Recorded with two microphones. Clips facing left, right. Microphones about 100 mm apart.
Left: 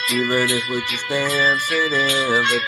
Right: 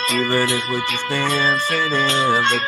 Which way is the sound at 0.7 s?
55° right (ahead or behind).